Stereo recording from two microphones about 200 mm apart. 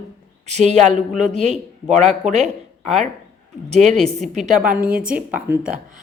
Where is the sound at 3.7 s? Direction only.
35° right (ahead or behind).